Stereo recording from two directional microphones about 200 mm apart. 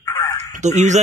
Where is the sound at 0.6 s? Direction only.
35° right (ahead or behind).